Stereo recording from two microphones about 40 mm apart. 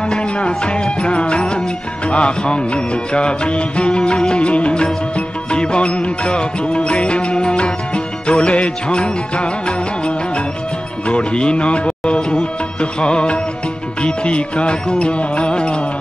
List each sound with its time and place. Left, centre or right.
0.1 s music: left